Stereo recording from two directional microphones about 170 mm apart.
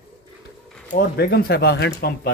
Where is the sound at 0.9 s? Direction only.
60° left (ahead or behind).